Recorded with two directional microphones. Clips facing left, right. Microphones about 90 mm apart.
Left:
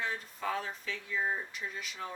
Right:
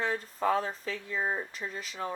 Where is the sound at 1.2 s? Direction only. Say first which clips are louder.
Right 1 dB; 25° right (ahead or behind).